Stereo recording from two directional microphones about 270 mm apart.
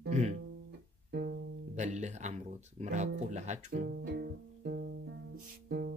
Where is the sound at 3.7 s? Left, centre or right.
Right.